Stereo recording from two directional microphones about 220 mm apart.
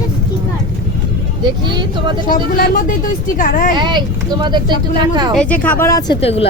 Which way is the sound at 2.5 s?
40° left (ahead or behind).